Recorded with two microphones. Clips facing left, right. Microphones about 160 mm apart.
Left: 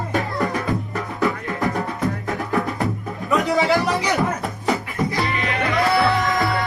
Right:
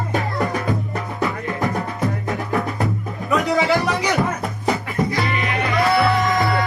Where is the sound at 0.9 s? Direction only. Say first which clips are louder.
Left 1 dB; 20° right (ahead or behind).